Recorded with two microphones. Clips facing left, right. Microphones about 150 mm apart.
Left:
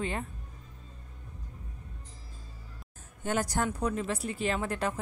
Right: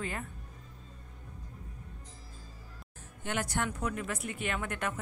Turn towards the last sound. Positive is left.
turn(degrees=30)  # may be behind; listen again after turning